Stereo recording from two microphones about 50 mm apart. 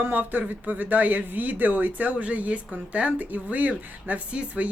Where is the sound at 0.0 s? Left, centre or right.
Right.